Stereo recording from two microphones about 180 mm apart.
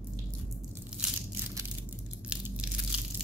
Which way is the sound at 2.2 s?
5° right (ahead or behind).